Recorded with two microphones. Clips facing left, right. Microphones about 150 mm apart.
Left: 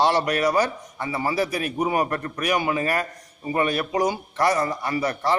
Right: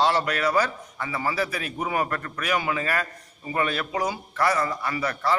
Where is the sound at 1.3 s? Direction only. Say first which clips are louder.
Left 4 dB; 15° left (ahead or behind).